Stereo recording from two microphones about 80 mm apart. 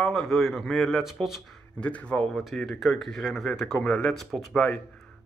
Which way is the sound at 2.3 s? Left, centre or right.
Centre.